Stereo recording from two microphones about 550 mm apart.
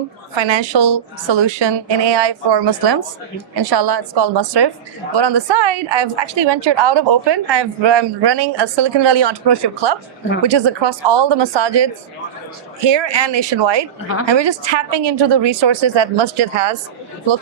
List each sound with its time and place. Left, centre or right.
0.3 s a woman's voice: right